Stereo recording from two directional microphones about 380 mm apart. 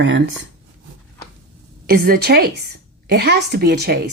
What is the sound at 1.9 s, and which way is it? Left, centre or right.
A woman's voice, right.